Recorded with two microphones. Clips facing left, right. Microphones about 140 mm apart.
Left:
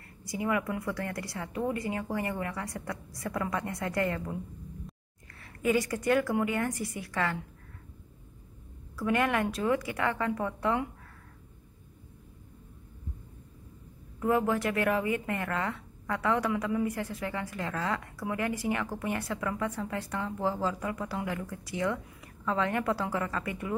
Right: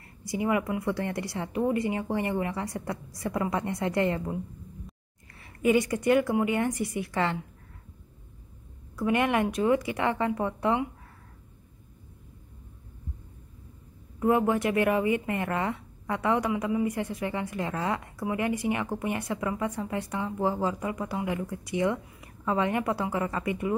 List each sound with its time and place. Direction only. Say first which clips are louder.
0.3 s speech: right 3 dB; 20° right (ahead or behind)
5.4 s speech: right 4 dB; 20° right (ahead or behind)
8.9 s speech: right 3 dB; 20° right (ahead or behind)
14.2 s speech: right 3 dB; 20° right (ahead or behind)